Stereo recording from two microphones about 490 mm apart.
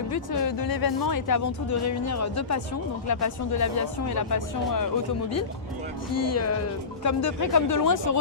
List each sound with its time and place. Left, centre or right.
0.1 s speech: left
6.1 s speech: left